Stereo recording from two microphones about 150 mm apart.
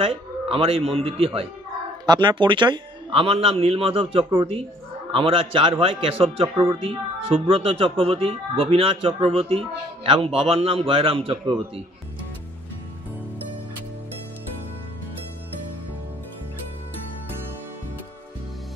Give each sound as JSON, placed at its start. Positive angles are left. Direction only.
{"t": 0.0, "sound": "speech", "side_deg": -40}
{"t": 2.0, "sound": "speech", "side_deg": -30}